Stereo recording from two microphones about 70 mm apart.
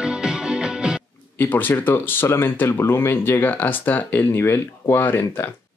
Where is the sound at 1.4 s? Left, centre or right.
Left.